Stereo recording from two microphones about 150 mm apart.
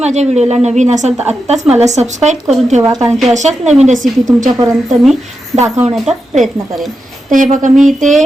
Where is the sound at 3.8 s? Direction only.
50° right (ahead or behind).